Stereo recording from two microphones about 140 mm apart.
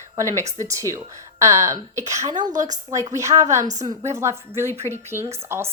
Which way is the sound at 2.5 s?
65° right (ahead or behind).